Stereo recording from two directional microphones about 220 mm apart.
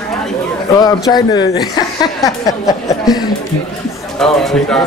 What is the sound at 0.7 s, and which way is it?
A woman's voice, 15° left (ahead or behind).